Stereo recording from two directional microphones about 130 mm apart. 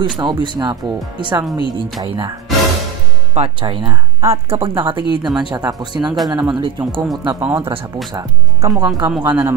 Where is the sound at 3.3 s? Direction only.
45° right (ahead or behind).